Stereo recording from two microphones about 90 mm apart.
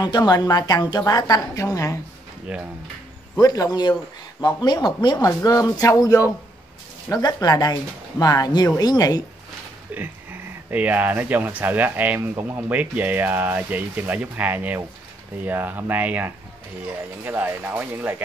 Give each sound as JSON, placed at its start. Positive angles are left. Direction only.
{"t": 0.0, "sound": "a woman's voice", "side_deg": 50}
{"t": 3.3, "sound": "a woman's voice", "side_deg": 45}
{"t": 5.1, "sound": "a woman's voice", "side_deg": 40}
{"t": 9.9, "sound": "speech", "side_deg": -20}